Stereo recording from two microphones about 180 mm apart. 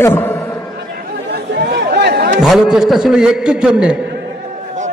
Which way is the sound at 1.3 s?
65° right (ahead or behind).